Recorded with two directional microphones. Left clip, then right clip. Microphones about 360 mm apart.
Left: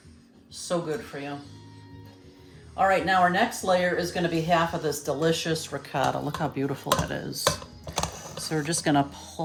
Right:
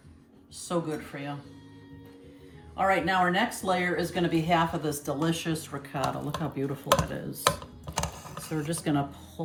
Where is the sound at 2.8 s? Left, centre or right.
Centre.